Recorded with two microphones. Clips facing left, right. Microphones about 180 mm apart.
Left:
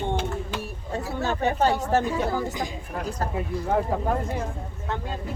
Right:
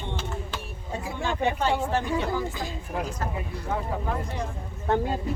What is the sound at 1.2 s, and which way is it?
Speech, 40° left (ahead or behind).